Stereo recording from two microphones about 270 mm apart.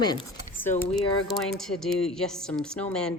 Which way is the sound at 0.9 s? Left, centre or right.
Centre.